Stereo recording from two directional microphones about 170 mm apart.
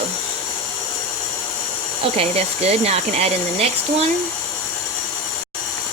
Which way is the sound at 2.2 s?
40° right (ahead or behind).